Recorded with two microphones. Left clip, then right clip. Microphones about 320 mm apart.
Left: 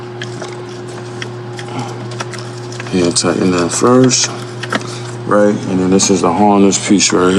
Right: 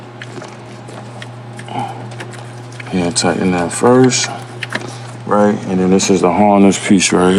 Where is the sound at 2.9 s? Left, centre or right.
Right.